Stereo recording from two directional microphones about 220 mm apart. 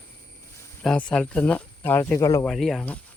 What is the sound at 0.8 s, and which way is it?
Speech, 5° left (ahead or behind).